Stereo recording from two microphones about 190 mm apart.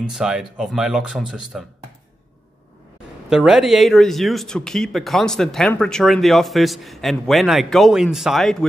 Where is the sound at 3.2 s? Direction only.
5° right (ahead or behind).